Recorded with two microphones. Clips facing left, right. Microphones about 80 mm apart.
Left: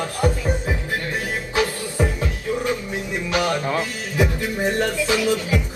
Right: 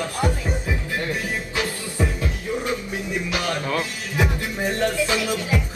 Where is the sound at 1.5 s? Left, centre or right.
Left.